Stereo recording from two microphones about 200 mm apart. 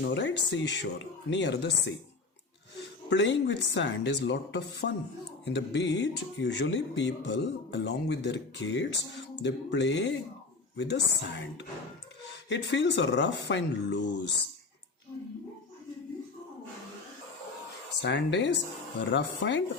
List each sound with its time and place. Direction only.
0.0 s speech: 60° left (ahead or behind)
3.1 s speech: 65° left (ahead or behind)
18.0 s speech: 65° left (ahead or behind)